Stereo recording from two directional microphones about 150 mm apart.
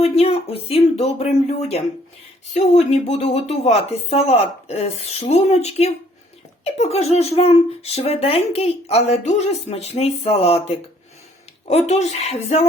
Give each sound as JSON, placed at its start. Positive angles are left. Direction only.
{"t": 0.0, "sound": "speech", "side_deg": 45}